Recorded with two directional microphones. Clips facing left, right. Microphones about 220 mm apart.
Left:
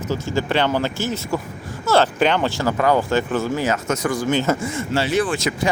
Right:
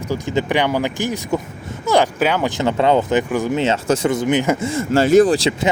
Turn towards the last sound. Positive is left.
turn(degrees=-30)  # may be behind; listen again after turning